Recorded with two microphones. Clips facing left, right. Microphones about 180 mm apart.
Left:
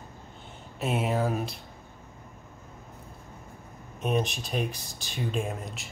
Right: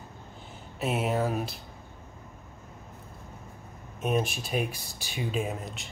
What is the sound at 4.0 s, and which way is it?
Speech, 5° right (ahead or behind).